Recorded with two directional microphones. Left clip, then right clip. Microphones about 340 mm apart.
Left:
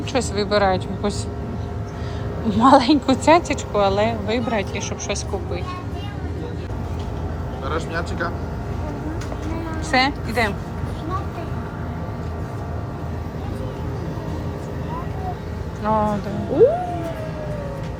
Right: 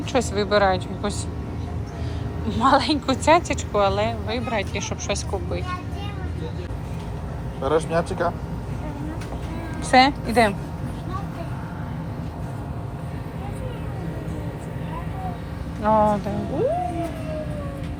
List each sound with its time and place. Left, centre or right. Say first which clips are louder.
0.1 s a woman's voice: even; centre
2.5 s speech: left 5 dB; centre
7.6 s speech: right 5 dB; centre
9.9 s a woman's voice: right 3 dB; centre
15.8 s a woman's voice: right 2 dB; centre